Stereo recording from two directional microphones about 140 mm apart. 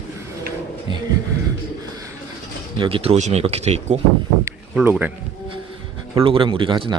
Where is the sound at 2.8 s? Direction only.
40° right (ahead or behind).